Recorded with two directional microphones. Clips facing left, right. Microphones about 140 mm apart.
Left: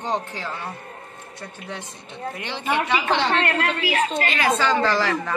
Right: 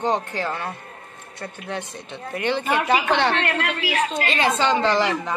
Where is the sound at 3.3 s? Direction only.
40° left (ahead or behind).